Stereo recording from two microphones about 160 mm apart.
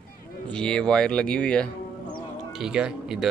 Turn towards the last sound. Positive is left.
turn(degrees=-5)  # may be behind; listen again after turning